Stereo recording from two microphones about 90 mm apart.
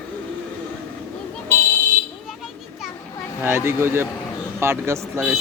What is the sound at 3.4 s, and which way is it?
Speech, 25° right (ahead or behind).